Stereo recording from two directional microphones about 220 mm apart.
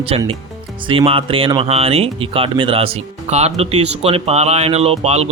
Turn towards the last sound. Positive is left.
turn(degrees=-30)  # may be behind; listen again after turning